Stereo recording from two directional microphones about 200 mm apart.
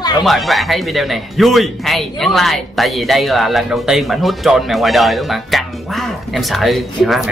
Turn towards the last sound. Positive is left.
turn(degrees=0)  # may be behind; listen again after turning